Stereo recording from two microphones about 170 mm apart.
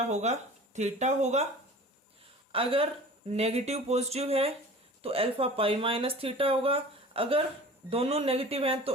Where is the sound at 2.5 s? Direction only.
35° right (ahead or behind).